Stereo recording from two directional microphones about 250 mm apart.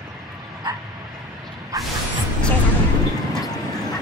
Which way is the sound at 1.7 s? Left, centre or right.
Centre.